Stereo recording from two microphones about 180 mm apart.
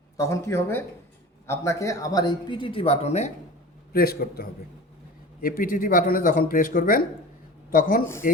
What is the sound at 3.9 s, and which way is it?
Speech, 55° left (ahead or behind).